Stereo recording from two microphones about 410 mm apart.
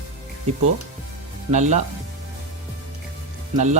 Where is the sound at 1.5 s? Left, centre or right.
Centre.